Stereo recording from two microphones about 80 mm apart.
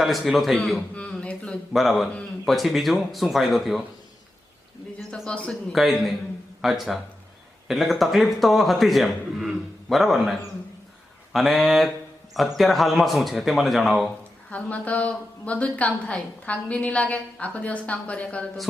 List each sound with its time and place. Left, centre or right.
0.0 s a man's voice: centre
0.9 s speech: centre
1.7 s a man's voice: centre
4.9 s a man's voice: centre
5.3 s a woman's voice: centre
5.7 s a man's voice: centre
14.5 s a woman's voice: centre